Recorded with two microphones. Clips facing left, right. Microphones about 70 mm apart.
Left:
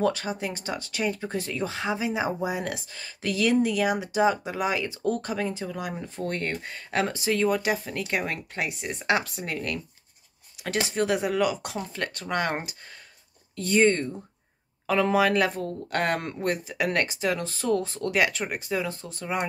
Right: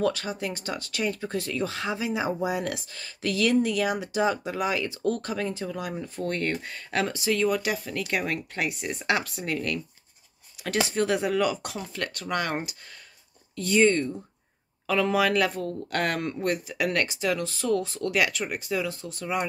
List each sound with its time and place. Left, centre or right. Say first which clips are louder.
0.0 s speech: left 1 dB; left
11.7 s speech: left 1 dB; left